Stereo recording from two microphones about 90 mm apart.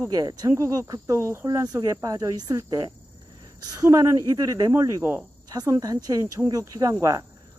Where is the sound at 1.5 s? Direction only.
40° right (ahead or behind).